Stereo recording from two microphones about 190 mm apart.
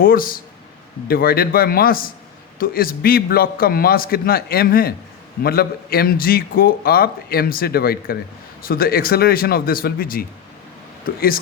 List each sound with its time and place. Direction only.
0.0 s a man's voice: 50° left (ahead or behind)